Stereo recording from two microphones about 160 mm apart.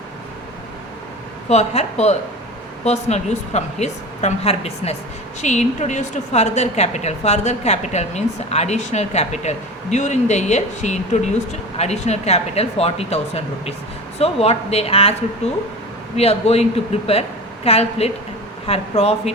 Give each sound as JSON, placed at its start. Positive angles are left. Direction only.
{"t": 1.5, "sound": "a woman's voice", "side_deg": 45}
{"t": 16.1, "sound": "speech", "side_deg": 40}